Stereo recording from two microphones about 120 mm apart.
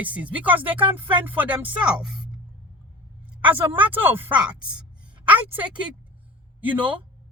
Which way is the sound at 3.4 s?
15° right (ahead or behind).